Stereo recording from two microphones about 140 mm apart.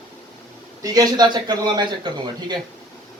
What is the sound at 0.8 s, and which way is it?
A man's voice, 30° right (ahead or behind).